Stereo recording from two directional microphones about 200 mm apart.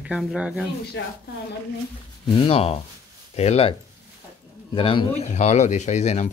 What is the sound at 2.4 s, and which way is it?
Speech, 30° left (ahead or behind).